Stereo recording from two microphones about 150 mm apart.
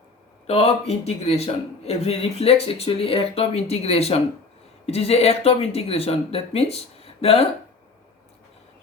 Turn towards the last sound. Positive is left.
turn(degrees=40)  # may be behind; listen again after turning